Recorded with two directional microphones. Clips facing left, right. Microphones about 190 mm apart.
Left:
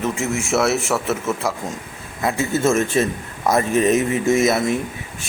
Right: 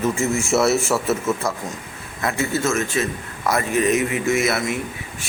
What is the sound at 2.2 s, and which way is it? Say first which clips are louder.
Speech: left 2 dB; 15° left (ahead or behind).